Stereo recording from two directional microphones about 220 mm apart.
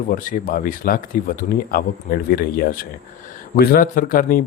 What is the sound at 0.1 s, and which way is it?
Speech, 40° left (ahead or behind).